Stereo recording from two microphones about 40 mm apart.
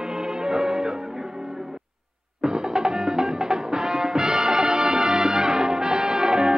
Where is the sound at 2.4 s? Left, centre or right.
Centre.